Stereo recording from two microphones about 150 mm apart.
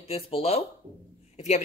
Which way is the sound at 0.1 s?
40° left (ahead or behind).